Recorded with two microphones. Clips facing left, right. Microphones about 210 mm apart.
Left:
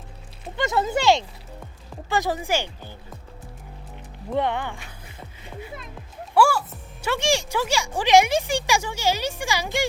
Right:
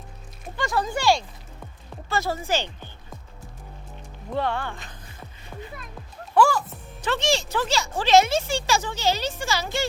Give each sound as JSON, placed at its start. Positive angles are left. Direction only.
{"t": 0.4, "sound": "speech", "side_deg": 20}
{"t": 4.4, "sound": "speech", "side_deg": 20}
{"t": 6.3, "sound": "speech", "side_deg": 10}